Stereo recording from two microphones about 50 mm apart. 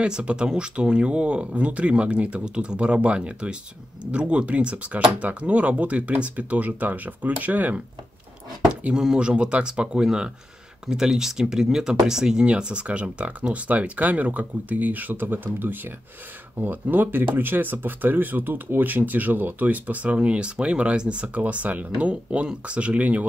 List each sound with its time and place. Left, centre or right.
0.0 s speech: centre
8.9 s speech: centre